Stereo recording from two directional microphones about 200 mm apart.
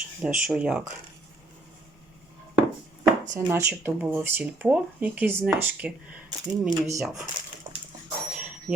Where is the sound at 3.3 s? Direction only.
15° right (ahead or behind).